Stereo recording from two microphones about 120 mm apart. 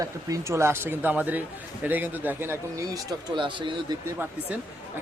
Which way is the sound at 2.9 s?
35° right (ahead or behind).